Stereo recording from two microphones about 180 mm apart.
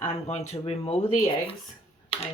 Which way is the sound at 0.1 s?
35° left (ahead or behind).